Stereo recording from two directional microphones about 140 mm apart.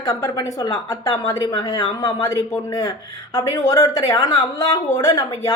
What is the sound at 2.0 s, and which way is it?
A woman's voice, 20° left (ahead or behind).